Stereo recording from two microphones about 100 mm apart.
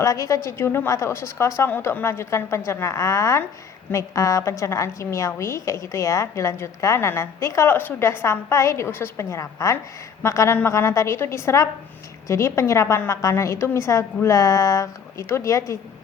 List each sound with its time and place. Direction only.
0.0 s a woman's voice: 35° left (ahead or behind)